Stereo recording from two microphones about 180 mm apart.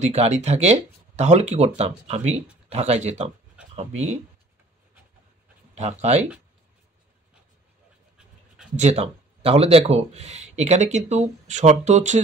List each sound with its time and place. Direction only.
0.0 s speech: 40° right (ahead or behind)
5.8 s speech: 40° right (ahead or behind)
8.7 s speech: 35° right (ahead or behind)